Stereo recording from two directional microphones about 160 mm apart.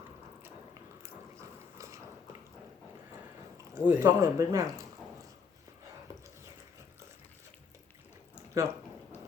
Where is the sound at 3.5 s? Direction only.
15° right (ahead or behind).